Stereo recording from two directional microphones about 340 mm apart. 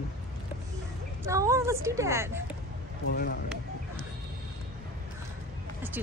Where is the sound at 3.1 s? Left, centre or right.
Left.